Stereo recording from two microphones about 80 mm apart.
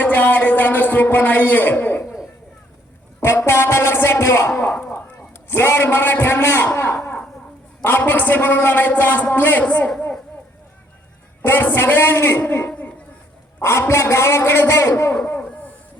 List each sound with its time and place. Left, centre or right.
0.0 s a man's voice: left
3.2 s a man's voice: left
4.7 s a man's voice: centre
6.9 s a sound: centre
7.9 s a man's voice: left
11.4 s a man's voice: left
12.6 s a sound: centre
13.6 s a man's voice: left
15.1 s a sound: centre